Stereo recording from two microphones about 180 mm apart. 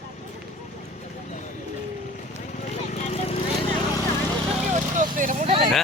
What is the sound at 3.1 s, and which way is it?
Horse, 35° left (ahead or behind).